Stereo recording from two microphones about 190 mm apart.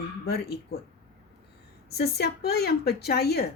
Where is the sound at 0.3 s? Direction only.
55° left (ahead or behind).